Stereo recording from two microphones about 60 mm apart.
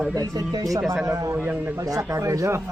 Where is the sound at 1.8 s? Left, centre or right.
Right.